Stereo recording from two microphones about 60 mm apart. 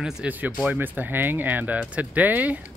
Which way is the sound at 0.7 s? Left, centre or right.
Right.